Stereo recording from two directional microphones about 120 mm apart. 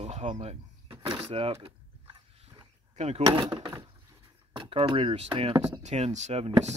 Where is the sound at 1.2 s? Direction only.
50° right (ahead or behind).